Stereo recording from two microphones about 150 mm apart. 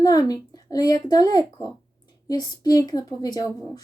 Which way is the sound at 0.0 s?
25° left (ahead or behind).